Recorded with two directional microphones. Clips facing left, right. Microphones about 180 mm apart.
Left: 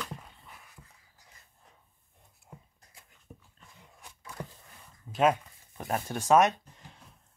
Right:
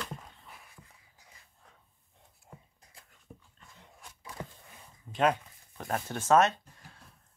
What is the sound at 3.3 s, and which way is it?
Dog, centre (ahead or behind).